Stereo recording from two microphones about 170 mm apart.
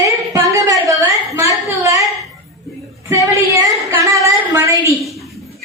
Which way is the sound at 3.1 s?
20° right (ahead or behind).